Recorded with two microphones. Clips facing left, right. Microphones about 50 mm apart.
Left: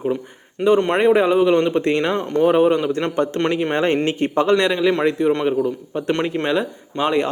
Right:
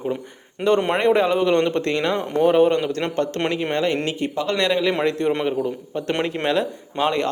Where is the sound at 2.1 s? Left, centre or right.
Centre.